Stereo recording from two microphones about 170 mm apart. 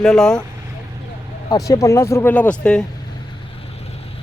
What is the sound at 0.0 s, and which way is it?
Speech, 5° left (ahead or behind).